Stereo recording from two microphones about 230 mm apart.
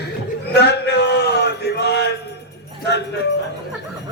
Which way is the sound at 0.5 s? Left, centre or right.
Left.